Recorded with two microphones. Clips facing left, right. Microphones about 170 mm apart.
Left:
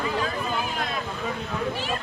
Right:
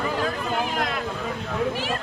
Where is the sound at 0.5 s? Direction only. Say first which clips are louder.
Right 3 dB; 75° right (ahead or behind).